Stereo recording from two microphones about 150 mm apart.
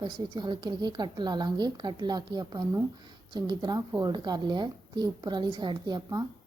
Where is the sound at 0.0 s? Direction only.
30° right (ahead or behind).